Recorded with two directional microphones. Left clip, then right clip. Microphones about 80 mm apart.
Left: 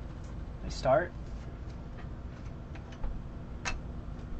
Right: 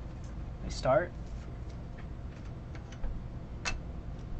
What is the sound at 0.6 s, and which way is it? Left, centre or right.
Speech, right.